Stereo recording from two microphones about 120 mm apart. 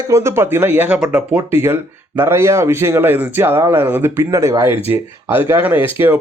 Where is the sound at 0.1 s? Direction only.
20° right (ahead or behind).